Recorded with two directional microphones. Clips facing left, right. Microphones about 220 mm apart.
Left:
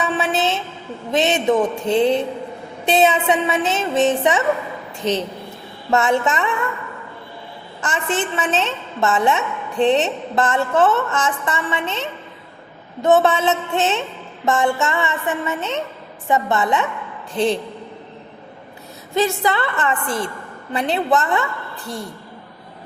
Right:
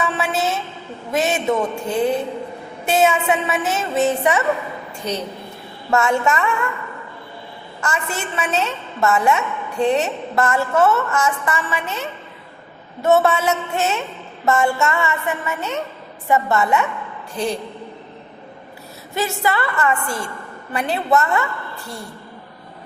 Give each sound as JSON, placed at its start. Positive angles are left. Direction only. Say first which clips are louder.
{"t": 0.0, "sound": "a sound", "louder": "left 1 dB", "side_deg": 20}
{"t": 1.1, "sound": "a woman's voice", "louder": "left 2 dB", "side_deg": 20}
{"t": 5.9, "sound": "a woman's voice", "louder": "even", "side_deg": 20}
{"t": 7.8, "sound": "a woman's voice", "louder": "left 3 dB", "side_deg": 20}
{"t": 19.4, "sound": "a woman's voice", "louder": "even", "side_deg": 20}